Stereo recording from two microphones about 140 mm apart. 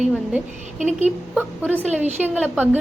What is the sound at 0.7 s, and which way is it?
Speech, 60° right (ahead or behind).